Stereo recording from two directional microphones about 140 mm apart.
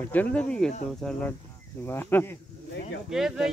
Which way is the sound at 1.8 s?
15° left (ahead or behind).